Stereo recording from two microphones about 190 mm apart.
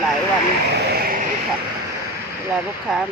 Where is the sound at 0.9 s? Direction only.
50° right (ahead or behind).